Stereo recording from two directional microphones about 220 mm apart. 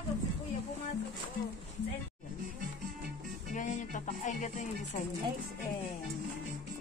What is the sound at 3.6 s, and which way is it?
Music, 35° left (ahead or behind).